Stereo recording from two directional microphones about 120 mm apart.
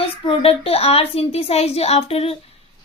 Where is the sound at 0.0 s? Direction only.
50° left (ahead or behind).